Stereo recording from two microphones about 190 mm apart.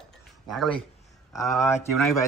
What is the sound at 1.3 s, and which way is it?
Speech, 15° left (ahead or behind).